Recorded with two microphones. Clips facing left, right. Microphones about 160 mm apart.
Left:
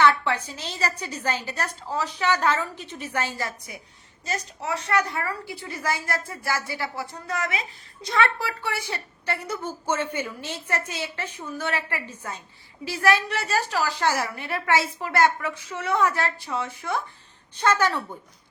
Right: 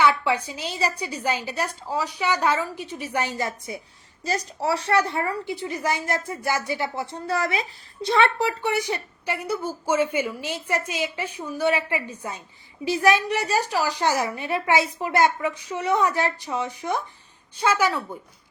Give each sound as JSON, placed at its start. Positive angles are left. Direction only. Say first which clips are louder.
{"t": 0.0, "sound": "a woman's voice", "louder": "even", "side_deg": -15}
{"t": 4.3, "sound": "a woman's voice", "louder": "right 5 dB", "side_deg": -35}